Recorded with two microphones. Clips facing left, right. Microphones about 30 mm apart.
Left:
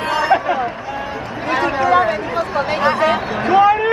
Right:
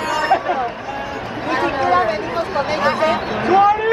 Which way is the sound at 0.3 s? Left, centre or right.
Centre.